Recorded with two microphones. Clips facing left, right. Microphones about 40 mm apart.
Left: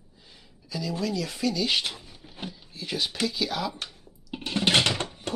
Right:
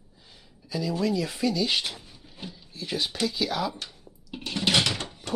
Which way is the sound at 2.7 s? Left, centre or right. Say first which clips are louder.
Right 1 dB; centre.